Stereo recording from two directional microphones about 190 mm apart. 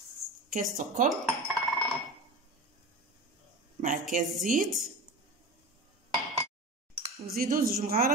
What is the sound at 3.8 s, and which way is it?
Speech, 45° right (ahead or behind).